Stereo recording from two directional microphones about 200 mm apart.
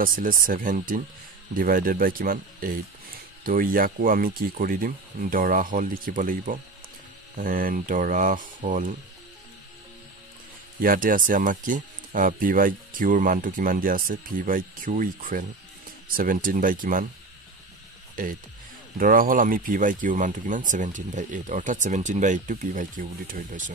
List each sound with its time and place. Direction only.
0.0 s speech: 45° right (ahead or behind)
10.8 s speech: 45° right (ahead or behind)
18.1 s speech: 45° right (ahead or behind)